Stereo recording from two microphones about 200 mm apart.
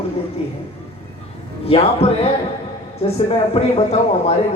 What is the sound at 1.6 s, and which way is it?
A woman's voice, 30° left (ahead or behind).